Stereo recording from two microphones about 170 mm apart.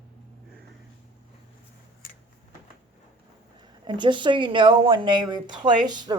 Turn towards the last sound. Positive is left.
turn(degrees=-25)  # may be behind; listen again after turning